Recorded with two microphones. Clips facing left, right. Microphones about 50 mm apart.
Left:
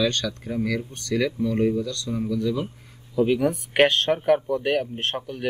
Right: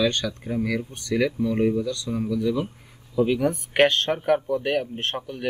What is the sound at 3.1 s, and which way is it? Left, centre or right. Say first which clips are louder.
Speech: left 1 dB; centre.